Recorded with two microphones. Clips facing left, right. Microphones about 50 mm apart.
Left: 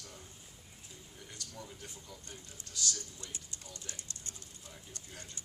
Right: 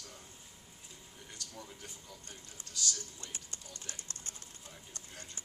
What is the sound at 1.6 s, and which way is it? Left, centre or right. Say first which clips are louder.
Speech: left 1 dB; centre.